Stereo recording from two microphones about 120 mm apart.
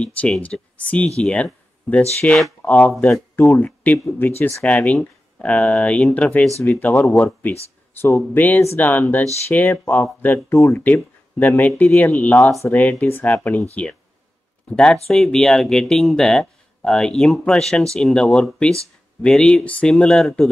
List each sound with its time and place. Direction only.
0.0 s speech: 10° left (ahead or behind)
3.0 s speech: 20° left (ahead or behind)
14.7 s speech: 5° left (ahead or behind)